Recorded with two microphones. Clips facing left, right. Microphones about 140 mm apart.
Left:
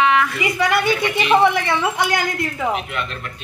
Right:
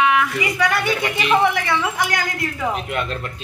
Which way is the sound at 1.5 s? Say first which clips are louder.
Left 2 dB; 30° left (ahead or behind).